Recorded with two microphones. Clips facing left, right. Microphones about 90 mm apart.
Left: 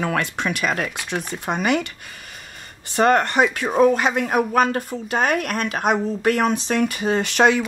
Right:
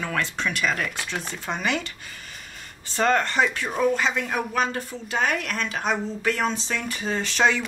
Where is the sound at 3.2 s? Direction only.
15° left (ahead or behind).